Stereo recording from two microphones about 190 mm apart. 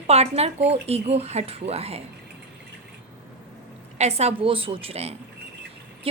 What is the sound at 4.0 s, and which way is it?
A woman's voice, 35° right (ahead or behind).